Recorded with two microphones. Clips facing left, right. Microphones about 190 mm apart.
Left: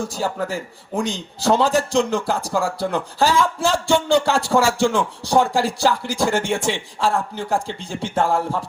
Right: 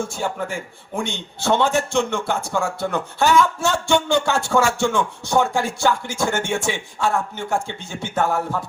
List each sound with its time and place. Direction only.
0.0 s a man's voice: 35° left (ahead or behind)